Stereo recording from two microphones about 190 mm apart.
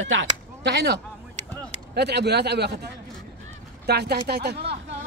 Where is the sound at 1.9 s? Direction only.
60° right (ahead or behind).